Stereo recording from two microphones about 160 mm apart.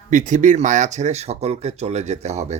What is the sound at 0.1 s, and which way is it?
Speech, 50° right (ahead or behind).